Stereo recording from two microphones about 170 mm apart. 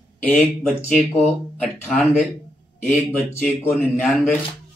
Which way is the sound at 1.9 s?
Centre (ahead or behind).